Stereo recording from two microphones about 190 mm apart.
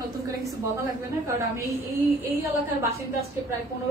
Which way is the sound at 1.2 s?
15° right (ahead or behind).